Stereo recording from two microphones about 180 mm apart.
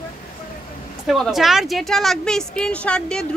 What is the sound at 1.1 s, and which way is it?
A woman's voice, centre (ahead or behind).